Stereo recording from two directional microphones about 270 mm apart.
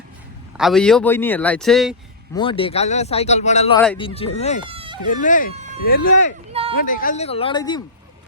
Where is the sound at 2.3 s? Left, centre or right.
Centre.